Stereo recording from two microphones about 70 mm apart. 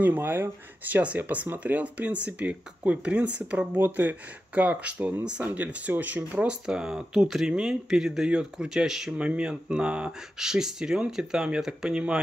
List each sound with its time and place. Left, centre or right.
0.0 s speech: right
3.7 s speech: right; by 12.0 s centre